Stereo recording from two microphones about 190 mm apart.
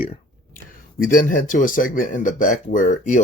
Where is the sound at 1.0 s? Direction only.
45° left (ahead or behind).